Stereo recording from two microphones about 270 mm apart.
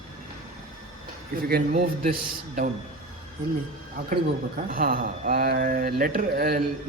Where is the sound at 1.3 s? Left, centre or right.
Right.